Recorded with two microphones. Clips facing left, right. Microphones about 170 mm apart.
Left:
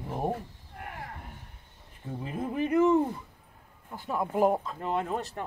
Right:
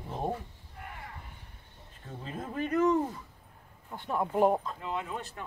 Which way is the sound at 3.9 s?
Centre (ahead or behind).